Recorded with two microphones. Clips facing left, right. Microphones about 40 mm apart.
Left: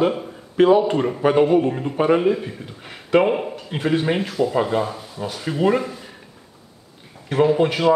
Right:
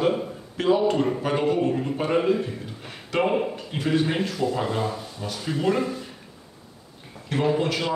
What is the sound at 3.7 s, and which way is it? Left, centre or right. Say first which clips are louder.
Speech: left 5 dB; left.